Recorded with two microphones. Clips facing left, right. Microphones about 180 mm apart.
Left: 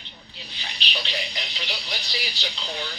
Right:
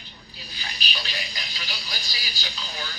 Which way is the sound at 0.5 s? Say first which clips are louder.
Left 2 dB; 25° left (ahead or behind).